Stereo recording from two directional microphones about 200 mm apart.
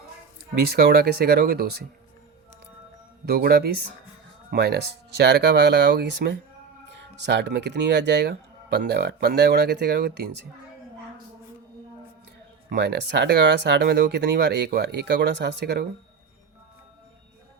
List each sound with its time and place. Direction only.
0.7 s speech: 50° right (ahead or behind)
3.2 s speech: 50° right (ahead or behind)
12.7 s speech: 55° right (ahead or behind)